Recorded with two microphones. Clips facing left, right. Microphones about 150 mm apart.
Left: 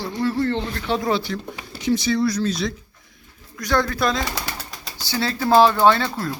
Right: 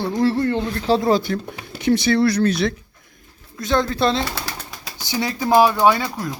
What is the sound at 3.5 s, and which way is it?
A man's voice, 20° right (ahead or behind).